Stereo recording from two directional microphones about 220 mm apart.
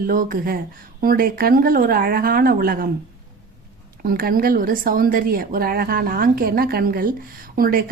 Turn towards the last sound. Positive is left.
turn(degrees=-40)  # may be behind; listen again after turning